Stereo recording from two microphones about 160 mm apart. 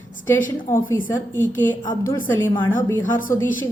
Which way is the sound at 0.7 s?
15° left (ahead or behind).